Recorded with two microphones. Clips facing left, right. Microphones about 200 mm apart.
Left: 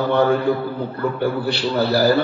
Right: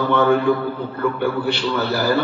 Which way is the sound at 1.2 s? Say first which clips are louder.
Even; 35° left (ahead or behind).